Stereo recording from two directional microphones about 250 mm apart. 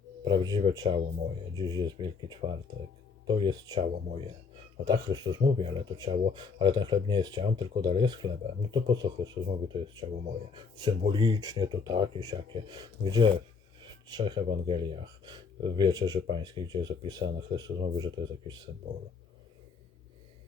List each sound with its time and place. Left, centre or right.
0.3 s speech: centre